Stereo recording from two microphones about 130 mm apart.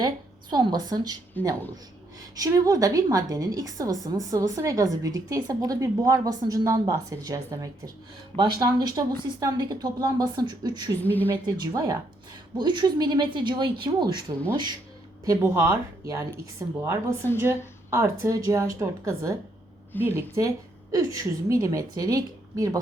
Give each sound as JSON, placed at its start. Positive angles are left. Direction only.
{"t": 0.5, "sound": "speech", "side_deg": -35}
{"t": 1.4, "sound": "a woman's voice", "side_deg": 15}
{"t": 2.3, "sound": "a woman's voice", "side_deg": -30}
{"t": 11.0, "sound": "a woman's voice", "side_deg": 15}
{"t": 11.4, "sound": "speech", "side_deg": -35}
{"t": 15.4, "sound": "a woman's voice", "side_deg": -20}